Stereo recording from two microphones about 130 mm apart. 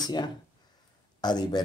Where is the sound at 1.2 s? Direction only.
35° left (ahead or behind).